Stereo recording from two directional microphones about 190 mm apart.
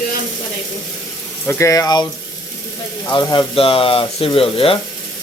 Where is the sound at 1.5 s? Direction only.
15° left (ahead or behind).